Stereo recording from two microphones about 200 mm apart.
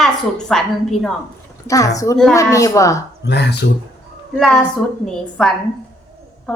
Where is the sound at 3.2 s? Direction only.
55° left (ahead or behind).